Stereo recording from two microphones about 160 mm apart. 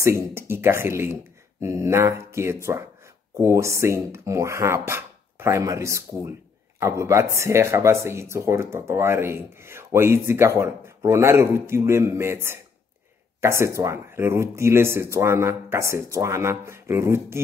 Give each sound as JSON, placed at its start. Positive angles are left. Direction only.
{"t": 0.0, "sound": "speech", "side_deg": -15}